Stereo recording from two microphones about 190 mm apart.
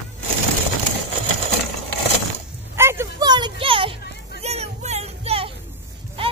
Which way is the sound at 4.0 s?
60° left (ahead or behind).